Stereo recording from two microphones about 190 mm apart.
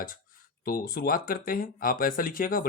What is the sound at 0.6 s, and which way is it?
Speech, 50° left (ahead or behind).